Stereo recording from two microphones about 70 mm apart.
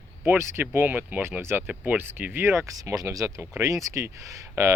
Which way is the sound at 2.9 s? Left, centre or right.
Right.